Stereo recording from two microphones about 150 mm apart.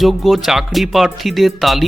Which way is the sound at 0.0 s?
Centre (ahead or behind).